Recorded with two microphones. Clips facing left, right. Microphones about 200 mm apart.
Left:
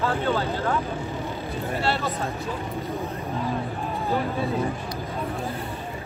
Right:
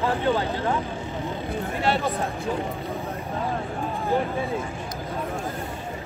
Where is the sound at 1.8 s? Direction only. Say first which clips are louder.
Right 3 dB; 15° right (ahead or behind).